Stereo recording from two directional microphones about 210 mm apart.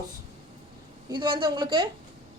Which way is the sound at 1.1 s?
20° right (ahead or behind).